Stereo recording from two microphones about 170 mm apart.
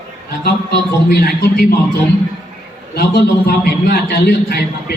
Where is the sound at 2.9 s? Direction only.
70° left (ahead or behind).